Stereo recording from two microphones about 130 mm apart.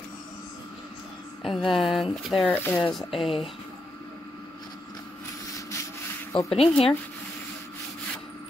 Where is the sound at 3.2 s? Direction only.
45° left (ahead or behind).